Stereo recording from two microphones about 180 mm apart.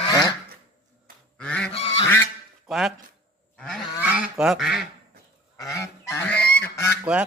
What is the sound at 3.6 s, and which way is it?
Cattle, 5° left (ahead or behind).